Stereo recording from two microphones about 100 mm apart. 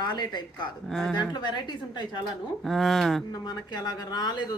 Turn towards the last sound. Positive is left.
turn(degrees=40)  # may be behind; listen again after turning